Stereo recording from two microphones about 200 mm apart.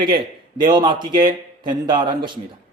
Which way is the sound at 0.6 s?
20° right (ahead or behind).